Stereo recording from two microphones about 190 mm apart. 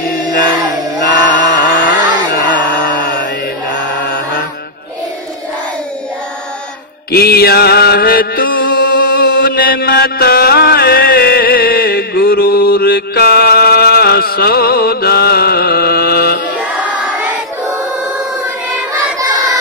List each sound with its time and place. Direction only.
0.4 s music: 45° left (ahead or behind)
1.0 s chant: 70° left (ahead or behind)
1.3 s a sound: 45° left (ahead or behind)
2.5 s music: 65° left (ahead or behind)
3.7 s chant: 65° left (ahead or behind)
7.1 s mantra: 55° left (ahead or behind)
19.1 s child singing: 20° right (ahead or behind)